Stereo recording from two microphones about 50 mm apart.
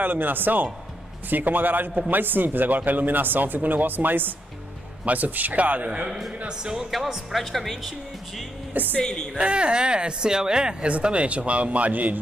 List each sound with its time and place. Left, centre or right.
0.0 s a man's voice: right
6.0 s speech: centre
9.0 s a woman's voice: centre
9.4 s speech: right